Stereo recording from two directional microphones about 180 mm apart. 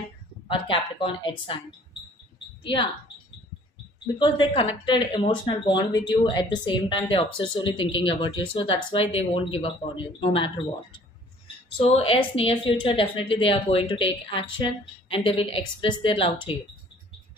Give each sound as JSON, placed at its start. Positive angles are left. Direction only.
{"t": 0.5, "sound": "speech", "side_deg": 30}
{"t": 2.6, "sound": "speech", "side_deg": 25}
{"t": 4.2, "sound": "speech", "side_deg": 25}
{"t": 11.8, "sound": "a woman's voice", "side_deg": 30}